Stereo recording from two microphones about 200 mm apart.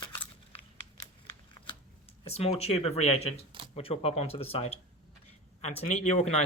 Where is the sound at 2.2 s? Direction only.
30° left (ahead or behind).